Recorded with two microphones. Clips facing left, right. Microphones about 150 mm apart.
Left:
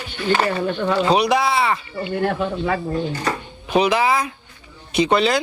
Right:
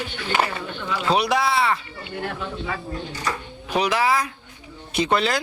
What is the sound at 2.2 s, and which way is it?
Speech, 55° left (ahead or behind).